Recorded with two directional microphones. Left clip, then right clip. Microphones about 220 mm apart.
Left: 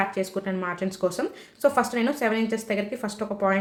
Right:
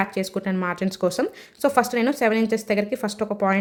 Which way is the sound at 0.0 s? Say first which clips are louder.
Right 1 dB; 40° right (ahead or behind).